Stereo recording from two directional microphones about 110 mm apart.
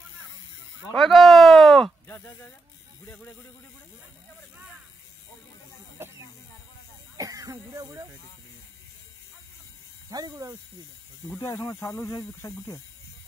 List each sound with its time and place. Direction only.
0.9 s a sound: centre (ahead or behind)
2.0 s speech: 15° left (ahead or behind)
7.2 s speech: 30° right (ahead or behind)
10.0 s speech: 35° right (ahead or behind)
11.2 s speech: 25° left (ahead or behind)